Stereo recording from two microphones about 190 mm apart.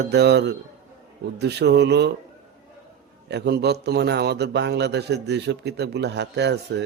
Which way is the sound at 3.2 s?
60° right (ahead or behind).